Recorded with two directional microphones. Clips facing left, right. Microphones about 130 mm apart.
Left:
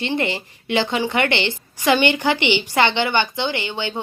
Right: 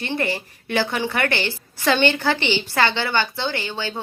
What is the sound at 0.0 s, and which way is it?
A woman's voice, 20° left (ahead or behind).